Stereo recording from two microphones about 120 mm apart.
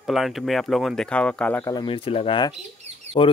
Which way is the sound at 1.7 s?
50° left (ahead or behind).